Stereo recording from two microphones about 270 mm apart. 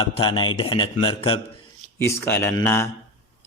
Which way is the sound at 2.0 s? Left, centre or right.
Centre.